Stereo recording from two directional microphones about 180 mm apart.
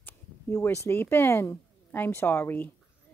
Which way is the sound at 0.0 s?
15° left (ahead or behind).